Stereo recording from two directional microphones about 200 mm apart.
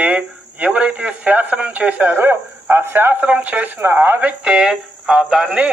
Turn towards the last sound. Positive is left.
turn(degrees=-5)  # may be behind; listen again after turning